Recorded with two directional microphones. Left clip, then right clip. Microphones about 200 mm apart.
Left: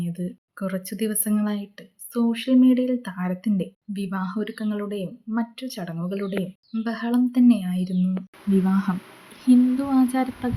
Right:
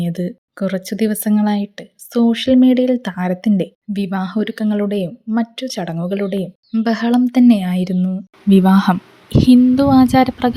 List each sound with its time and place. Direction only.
0.0 s speech: 35° right (ahead or behind)